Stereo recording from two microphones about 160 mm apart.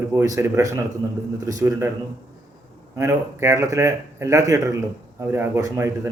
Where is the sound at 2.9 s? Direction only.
15° right (ahead or behind).